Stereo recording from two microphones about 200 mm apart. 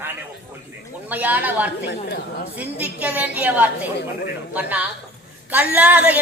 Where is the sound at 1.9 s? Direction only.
55° left (ahead or behind).